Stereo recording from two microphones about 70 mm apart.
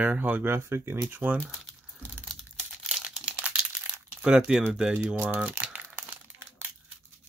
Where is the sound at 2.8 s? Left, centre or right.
Centre.